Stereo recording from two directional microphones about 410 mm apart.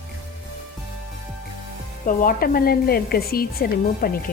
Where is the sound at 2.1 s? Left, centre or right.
Left.